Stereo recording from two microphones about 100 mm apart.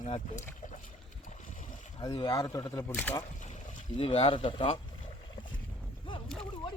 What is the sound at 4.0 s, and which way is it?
Speech, 70° left (ahead or behind).